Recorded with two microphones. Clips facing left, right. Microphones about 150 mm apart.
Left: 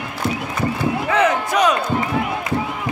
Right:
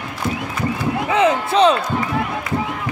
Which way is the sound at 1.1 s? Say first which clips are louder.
Right 3 dB; 25° right (ahead or behind).